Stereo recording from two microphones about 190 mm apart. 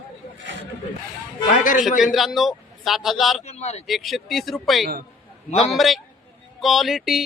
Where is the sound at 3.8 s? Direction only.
Centre (ahead or behind).